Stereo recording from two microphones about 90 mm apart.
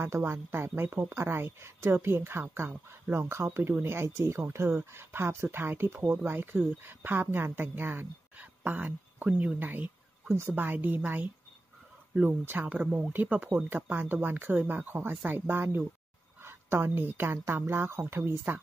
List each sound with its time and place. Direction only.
0.0 s a woman's voice: 25° right (ahead or behind)